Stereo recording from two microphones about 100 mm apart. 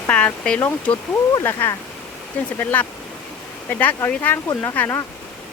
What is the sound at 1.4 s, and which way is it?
Speech, 25° left (ahead or behind).